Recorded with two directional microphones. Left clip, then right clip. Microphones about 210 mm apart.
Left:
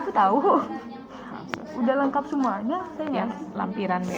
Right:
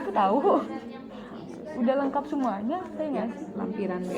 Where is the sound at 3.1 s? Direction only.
40° left (ahead or behind).